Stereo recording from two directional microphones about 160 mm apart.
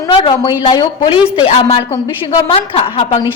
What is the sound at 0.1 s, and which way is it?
A woman's voice, 30° left (ahead or behind).